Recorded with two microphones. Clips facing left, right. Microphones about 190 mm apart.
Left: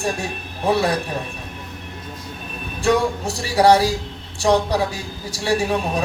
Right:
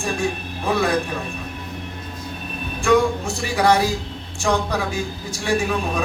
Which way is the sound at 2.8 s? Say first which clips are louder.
Right 1 dB; 40° left (ahead or behind).